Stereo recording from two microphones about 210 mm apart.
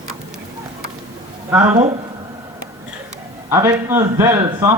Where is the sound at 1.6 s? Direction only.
15° right (ahead or behind).